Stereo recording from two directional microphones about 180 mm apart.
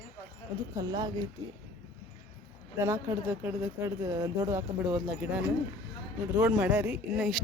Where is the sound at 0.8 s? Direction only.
20° right (ahead or behind).